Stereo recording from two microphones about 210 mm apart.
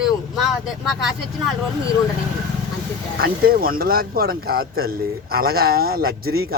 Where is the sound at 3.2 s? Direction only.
45° right (ahead or behind).